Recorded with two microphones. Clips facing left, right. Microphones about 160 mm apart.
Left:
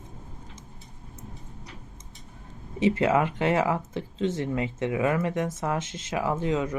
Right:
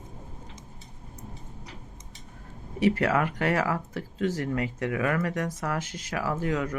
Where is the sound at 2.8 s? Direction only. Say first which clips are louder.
Left 1 dB; 20° left (ahead or behind).